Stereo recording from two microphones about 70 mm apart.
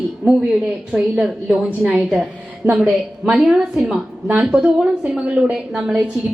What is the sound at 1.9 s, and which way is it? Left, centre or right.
A woman's voice, centre.